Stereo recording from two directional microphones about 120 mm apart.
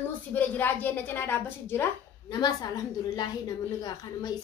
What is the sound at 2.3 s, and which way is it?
A woman's voice, 35° left (ahead or behind).